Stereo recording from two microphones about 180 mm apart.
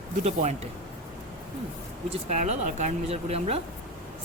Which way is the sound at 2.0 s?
40° right (ahead or behind).